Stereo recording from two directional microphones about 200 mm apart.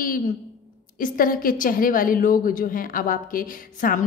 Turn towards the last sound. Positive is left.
turn(degrees=45)  # may be behind; listen again after turning